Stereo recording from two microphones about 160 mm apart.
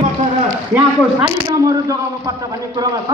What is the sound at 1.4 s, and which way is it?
Speech, 25° right (ahead or behind).